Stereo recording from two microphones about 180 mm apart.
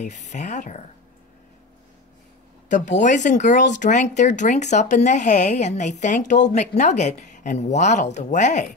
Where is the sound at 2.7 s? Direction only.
45° left (ahead or behind).